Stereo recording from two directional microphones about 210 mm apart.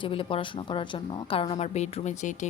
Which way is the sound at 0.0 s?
25° left (ahead or behind).